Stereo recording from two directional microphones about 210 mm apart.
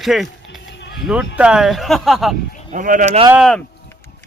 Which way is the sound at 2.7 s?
40° right (ahead or behind).